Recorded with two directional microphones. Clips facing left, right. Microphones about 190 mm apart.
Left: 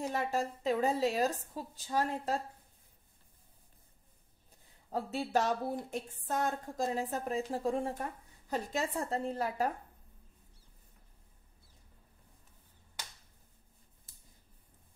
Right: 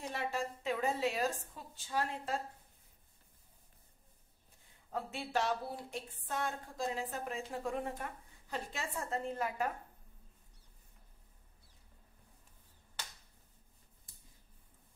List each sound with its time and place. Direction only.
0.1 s a woman's voice: 40° left (ahead or behind)
4.9 s a woman's voice: 40° left (ahead or behind)